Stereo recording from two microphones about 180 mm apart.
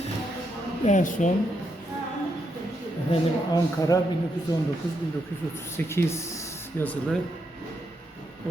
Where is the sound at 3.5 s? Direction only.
20° left (ahead or behind).